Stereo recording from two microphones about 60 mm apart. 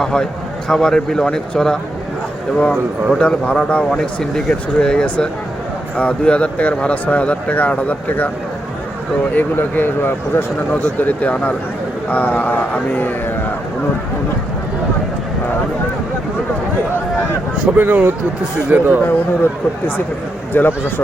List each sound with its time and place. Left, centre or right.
0.0 s speech: centre
3.2 s speech: centre
9.3 s speech: left
10.8 s speech: left
17.7 s speech: right
19.0 s speech: left